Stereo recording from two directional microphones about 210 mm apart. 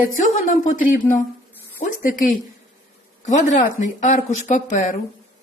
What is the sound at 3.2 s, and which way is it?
Speech, 35° left (ahead or behind).